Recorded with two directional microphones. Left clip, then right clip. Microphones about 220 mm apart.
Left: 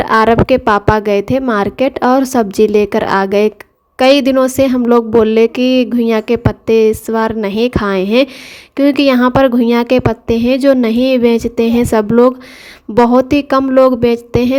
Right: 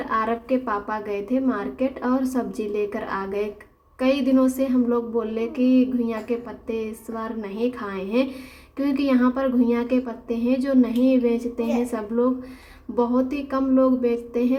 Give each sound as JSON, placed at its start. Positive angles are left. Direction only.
{"t": 0.0, "sound": "a woman's voice", "side_deg": 45}